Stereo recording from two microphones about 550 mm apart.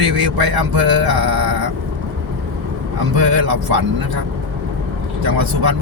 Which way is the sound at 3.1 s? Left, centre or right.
Right.